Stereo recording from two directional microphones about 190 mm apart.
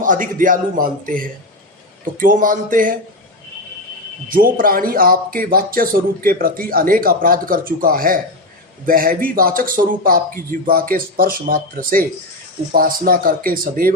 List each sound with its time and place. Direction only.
0.0 s speech: 45° right (ahead or behind)
4.3 s speech: 45° right (ahead or behind)